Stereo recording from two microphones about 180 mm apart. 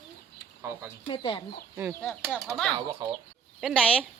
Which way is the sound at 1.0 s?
30° left (ahead or behind).